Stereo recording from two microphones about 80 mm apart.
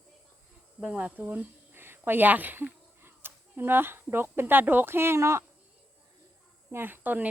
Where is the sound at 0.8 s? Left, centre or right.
Centre; by 5.4 s right.